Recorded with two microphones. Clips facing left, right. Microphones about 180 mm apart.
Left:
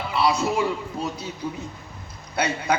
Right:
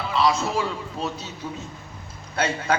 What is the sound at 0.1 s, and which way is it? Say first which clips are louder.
Speech: even; 15° left (ahead or behind).